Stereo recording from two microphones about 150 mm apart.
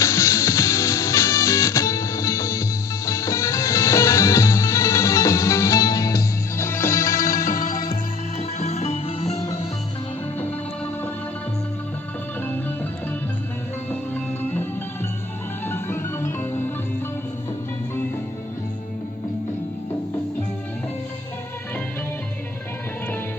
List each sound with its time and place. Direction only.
0.0 s music: 20° left (ahead or behind)
7.5 s music: 65° left (ahead or behind)
8.4 s music: 50° left (ahead or behind)
15.6 s music: 15° left (ahead or behind)